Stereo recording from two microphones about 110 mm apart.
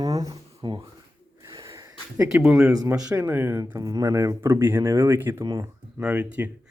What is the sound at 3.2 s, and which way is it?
Speech, 20° right (ahead or behind).